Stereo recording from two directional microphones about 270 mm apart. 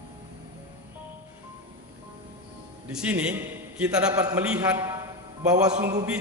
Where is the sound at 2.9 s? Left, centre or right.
Centre.